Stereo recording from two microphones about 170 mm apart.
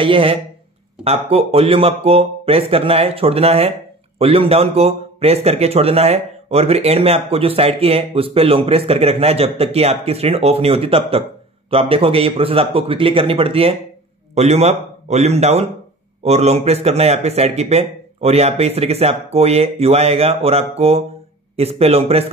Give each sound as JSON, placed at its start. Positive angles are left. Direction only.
{"t": 0.0, "sound": "speech", "side_deg": -30}